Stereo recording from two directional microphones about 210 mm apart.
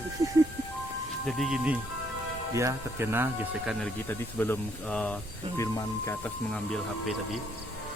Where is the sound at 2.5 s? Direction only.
15° right (ahead or behind).